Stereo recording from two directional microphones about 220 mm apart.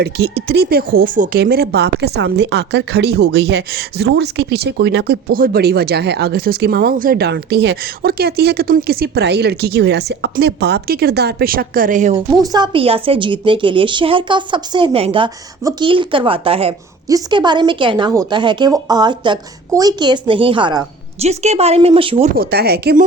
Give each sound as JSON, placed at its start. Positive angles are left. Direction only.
{"t": 0.0, "sound": "speech", "side_deg": -45}
{"t": 12.5, "sound": "a woman's voice", "side_deg": -20}
{"t": 22.4, "sound": "speech", "side_deg": -45}